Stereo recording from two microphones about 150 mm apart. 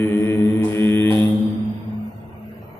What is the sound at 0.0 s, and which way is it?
Mantra, 15° left (ahead or behind).